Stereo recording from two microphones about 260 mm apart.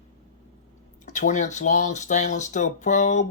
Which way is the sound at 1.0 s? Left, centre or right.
Left.